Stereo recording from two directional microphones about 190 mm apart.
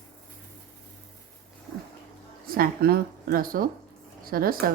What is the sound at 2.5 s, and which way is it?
Speech, 50° right (ahead or behind).